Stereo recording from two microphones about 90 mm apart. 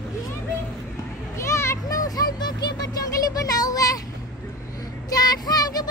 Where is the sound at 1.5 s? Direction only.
35° left (ahead or behind).